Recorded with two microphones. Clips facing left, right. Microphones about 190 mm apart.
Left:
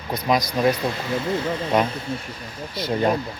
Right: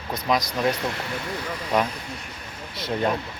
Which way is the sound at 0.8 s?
25° left (ahead or behind).